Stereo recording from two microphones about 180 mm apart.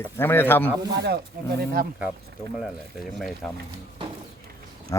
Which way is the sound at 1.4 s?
60° right (ahead or behind).